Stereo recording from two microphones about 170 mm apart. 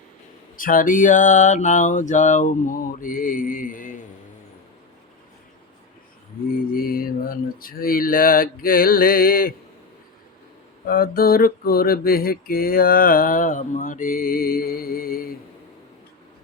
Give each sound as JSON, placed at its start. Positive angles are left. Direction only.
{"t": 0.6, "sound": "a sound", "side_deg": 55}
{"t": 6.7, "sound": "mantra", "side_deg": 60}
{"t": 10.8, "sound": "mantra", "side_deg": 60}